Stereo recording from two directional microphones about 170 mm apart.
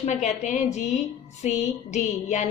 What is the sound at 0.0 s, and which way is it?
A woman's voice, 45° left (ahead or behind).